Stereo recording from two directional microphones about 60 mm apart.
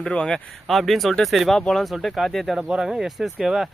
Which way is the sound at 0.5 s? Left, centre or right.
Centre.